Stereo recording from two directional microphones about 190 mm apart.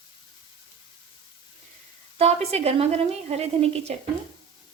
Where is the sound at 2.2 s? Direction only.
35° right (ahead or behind).